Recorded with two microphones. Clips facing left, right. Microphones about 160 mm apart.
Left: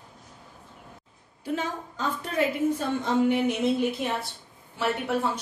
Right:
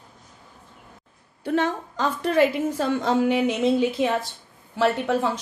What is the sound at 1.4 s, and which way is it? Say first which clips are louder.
A woman's voice: right 7 dB; 70° right (ahead or behind).